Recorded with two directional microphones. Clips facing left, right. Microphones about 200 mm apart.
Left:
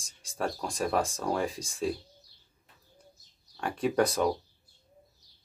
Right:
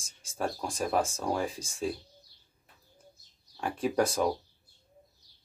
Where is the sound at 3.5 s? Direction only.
Centre (ahead or behind).